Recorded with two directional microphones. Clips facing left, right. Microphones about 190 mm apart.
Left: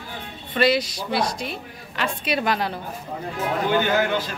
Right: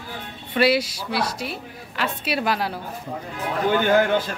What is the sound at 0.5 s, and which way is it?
Speech, 10° right (ahead or behind).